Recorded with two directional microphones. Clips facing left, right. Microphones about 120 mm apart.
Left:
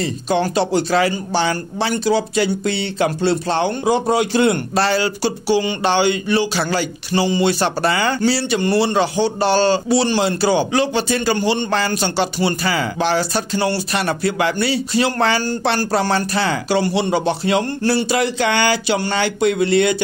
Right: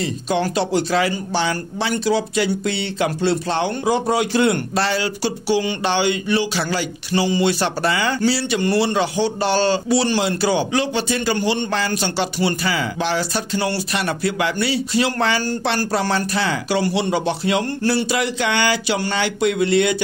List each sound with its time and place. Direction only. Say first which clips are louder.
0.0 s speech: left 2 dB; 30° left (ahead or behind)